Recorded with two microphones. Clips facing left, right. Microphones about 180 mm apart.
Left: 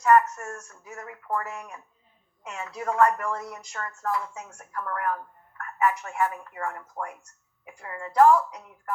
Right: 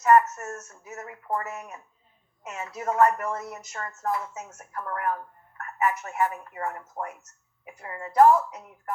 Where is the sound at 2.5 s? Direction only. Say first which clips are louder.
Right 1 dB; 25° right (ahead or behind).